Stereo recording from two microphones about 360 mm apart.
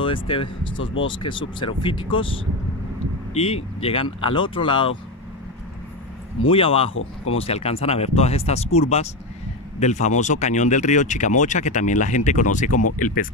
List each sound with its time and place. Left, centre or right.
0.0 s speech: centre
3.3 s speech: centre
6.5 s speech: centre
6.9 s speech: left
7.3 s speech: centre